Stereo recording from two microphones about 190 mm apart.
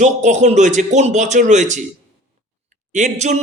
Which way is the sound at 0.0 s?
40° right (ahead or behind).